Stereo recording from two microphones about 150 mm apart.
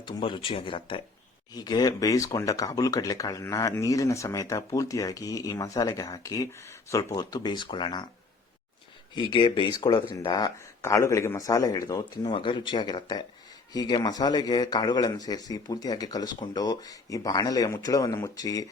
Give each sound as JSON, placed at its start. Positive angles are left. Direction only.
{"t": 0.0, "sound": "speech", "side_deg": 30}
{"t": 9.1, "sound": "speech", "side_deg": 30}